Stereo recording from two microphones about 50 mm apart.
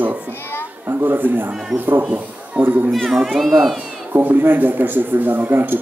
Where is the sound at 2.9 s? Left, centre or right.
Centre.